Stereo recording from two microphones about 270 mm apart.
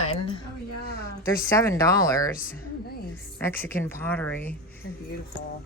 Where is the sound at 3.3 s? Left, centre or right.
Centre.